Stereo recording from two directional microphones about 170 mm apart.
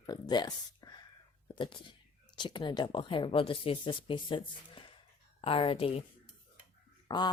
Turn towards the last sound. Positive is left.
turn(degrees=25)  # may be behind; listen again after turning